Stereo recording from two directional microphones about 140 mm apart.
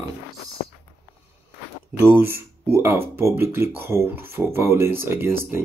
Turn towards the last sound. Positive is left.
turn(degrees=-15)  # may be behind; listen again after turning